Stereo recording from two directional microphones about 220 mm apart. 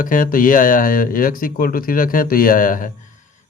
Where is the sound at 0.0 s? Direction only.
40° left (ahead or behind).